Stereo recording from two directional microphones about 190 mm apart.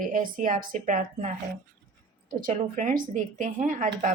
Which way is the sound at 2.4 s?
45° right (ahead or behind).